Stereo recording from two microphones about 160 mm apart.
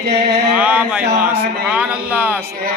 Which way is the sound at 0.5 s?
10° right (ahead or behind).